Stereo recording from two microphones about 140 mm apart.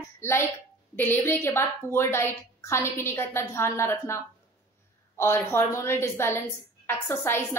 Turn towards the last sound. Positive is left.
turn(degrees=15)  # may be behind; listen again after turning